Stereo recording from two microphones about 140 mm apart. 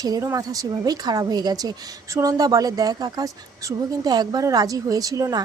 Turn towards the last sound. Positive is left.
turn(degrees=-25)  # may be behind; listen again after turning